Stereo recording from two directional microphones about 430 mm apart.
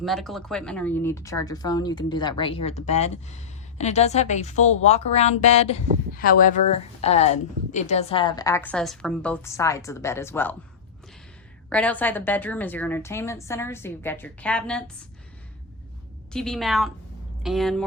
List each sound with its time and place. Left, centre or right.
0.0 s speech: centre
11.7 s a woman's voice: centre
16.3 s a woman's voice: centre